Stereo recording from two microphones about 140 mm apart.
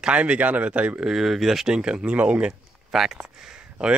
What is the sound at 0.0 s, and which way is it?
Speech, 10° right (ahead or behind).